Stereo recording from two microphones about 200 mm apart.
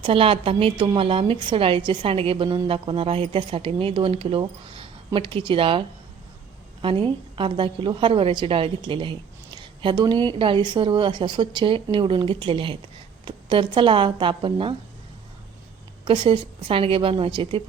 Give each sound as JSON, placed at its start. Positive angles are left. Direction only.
{"t": 0.0, "sound": "a woman's voice", "side_deg": -25}
{"t": 6.8, "sound": "a woman's voice", "side_deg": -25}
{"t": 16.0, "sound": "a woman's voice", "side_deg": -25}